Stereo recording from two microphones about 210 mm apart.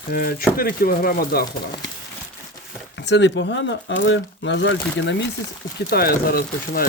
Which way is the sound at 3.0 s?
60° left (ahead or behind).